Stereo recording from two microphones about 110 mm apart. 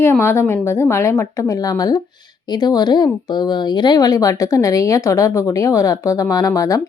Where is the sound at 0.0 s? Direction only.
25° left (ahead or behind).